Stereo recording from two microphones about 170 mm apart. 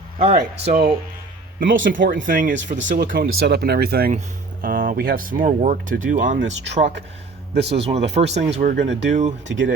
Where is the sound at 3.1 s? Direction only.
75° right (ahead or behind).